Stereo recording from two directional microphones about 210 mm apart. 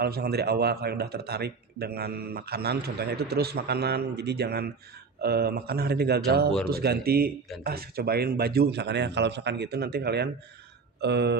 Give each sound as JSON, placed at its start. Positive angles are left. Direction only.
{"t": 0.0, "sound": "speech", "side_deg": -50}